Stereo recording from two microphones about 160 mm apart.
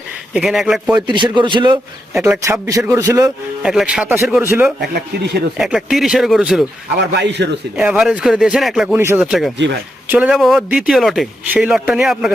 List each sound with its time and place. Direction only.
0.3 s speech: centre (ahead or behind)
0.9 s a man's voice: 30° right (ahead or behind)
2.2 s a man's voice: 15° right (ahead or behind)
3.6 s speech: 5° right (ahead or behind)
5.1 s a man's voice: 90° right
5.5 s speech: 5° right (ahead or behind)
7.0 s a man's voice: 90° right
7.8 s speech: 5° right (ahead or behind)
9.0 s a man's voice: 15° right (ahead or behind)
9.2 s a man's voice: centre (ahead or behind)